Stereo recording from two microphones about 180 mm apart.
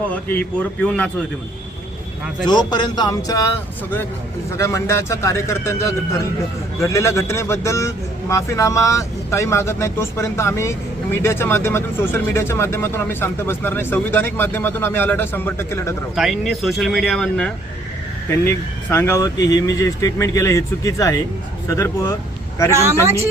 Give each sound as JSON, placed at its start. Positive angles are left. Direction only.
{"t": 0.1, "sound": "speech", "side_deg": 10}
{"t": 2.5, "sound": "speech", "side_deg": 25}
{"t": 4.5, "sound": "speech", "side_deg": 15}
{"t": 16.1, "sound": "speech", "side_deg": 0}
{"t": 18.9, "sound": "speech", "side_deg": 15}
{"t": 22.7, "sound": "speech", "side_deg": -15}